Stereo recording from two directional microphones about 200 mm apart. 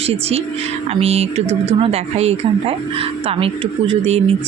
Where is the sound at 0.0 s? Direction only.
30° right (ahead or behind).